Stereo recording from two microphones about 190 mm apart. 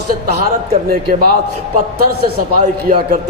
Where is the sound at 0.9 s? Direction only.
50° right (ahead or behind).